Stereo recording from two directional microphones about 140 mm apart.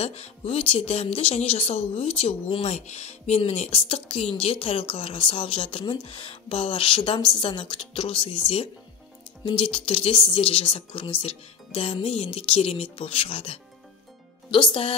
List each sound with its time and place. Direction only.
0.0 s speech: 50° left (ahead or behind)